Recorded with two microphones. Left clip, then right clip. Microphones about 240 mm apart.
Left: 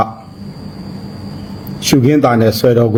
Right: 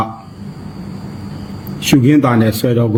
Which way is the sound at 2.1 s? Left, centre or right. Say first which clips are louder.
Left 4 dB; left.